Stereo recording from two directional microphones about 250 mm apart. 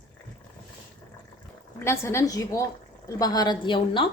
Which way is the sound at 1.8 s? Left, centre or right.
Centre.